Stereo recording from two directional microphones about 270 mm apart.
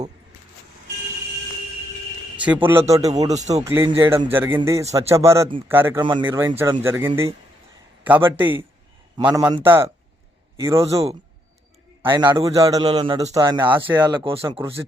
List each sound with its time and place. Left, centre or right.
2.3 s a man's voice: centre
10.8 s a man's voice: right